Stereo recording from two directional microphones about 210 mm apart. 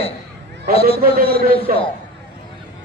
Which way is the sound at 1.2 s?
25° left (ahead or behind).